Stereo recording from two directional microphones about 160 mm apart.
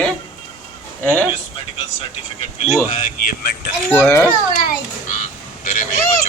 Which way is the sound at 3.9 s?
15° left (ahead or behind).